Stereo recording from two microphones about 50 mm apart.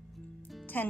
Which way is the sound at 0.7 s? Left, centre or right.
Left.